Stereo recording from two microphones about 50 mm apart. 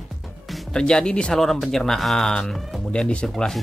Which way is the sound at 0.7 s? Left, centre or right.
Centre.